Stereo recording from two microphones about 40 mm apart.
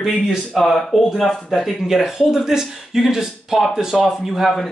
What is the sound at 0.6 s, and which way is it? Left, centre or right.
Speech, centre.